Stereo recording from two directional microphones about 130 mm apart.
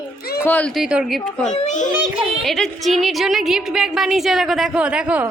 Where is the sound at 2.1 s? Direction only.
Centre (ahead or behind).